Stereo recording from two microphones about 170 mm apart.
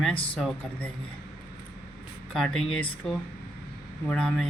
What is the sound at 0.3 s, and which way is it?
Speech, 5° left (ahead or behind).